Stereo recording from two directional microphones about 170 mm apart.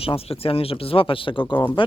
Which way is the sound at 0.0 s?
35° left (ahead or behind).